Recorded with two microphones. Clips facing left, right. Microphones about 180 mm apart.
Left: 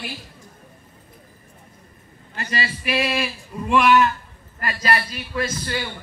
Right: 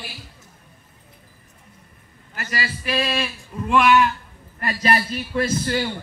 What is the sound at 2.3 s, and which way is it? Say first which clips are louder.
Speech: left 1 dB; 25° left (ahead or behind).